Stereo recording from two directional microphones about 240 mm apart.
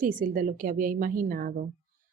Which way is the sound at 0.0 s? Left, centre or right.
Right.